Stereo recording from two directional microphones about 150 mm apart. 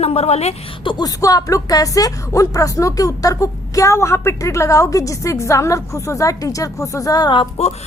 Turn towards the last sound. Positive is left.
turn(degrees=25)  # may be behind; listen again after turning